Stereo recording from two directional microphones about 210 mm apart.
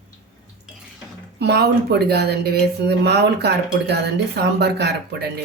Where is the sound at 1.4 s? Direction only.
50° right (ahead or behind).